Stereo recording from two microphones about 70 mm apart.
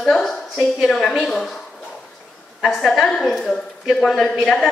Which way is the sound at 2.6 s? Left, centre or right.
Centre.